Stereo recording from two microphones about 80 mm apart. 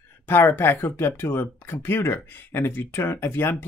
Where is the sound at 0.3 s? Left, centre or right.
Left.